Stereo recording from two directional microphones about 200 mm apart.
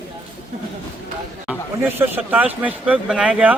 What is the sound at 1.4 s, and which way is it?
Speech, 10° right (ahead or behind).